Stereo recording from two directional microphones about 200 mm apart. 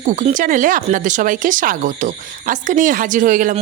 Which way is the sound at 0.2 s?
40° right (ahead or behind).